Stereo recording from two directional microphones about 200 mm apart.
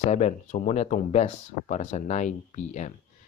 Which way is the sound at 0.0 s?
35° left (ahead or behind).